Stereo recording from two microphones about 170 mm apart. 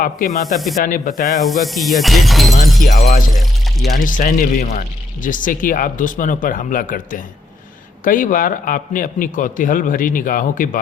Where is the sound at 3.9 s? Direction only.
50° left (ahead or behind).